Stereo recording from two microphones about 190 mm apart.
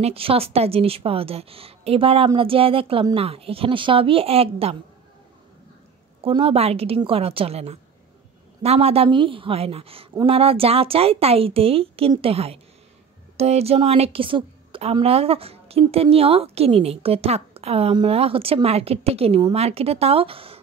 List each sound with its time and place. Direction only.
0.0 s a woman's voice: 30° right (ahead or behind)
6.2 s a woman's voice: 30° right (ahead or behind)